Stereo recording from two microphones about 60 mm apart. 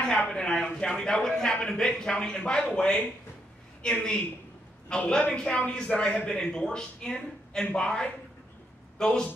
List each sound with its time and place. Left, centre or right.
0.0 s a man's voice: centre